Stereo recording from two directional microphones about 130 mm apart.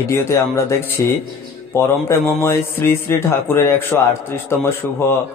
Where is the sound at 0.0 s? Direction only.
20° left (ahead or behind).